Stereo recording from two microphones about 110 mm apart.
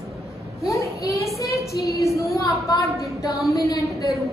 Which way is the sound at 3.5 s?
30° left (ahead or behind).